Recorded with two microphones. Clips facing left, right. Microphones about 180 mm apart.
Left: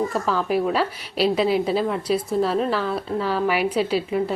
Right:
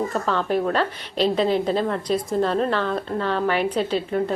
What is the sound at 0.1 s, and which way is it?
A woman's voice, 5° left (ahead or behind).